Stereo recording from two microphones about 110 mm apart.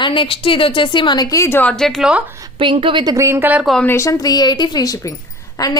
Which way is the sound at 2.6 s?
50° right (ahead or behind).